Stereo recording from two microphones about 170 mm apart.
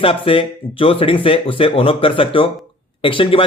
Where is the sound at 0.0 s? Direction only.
30° left (ahead or behind).